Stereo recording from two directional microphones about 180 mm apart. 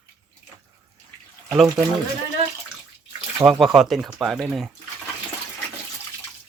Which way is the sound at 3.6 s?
Centre (ahead or behind).